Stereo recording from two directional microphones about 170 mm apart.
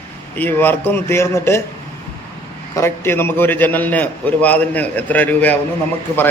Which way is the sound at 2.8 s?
15° left (ahead or behind).